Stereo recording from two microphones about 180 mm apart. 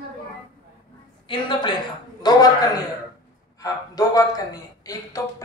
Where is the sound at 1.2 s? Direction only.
25° left (ahead or behind).